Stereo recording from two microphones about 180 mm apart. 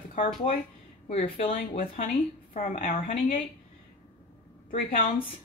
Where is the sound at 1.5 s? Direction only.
50° left (ahead or behind).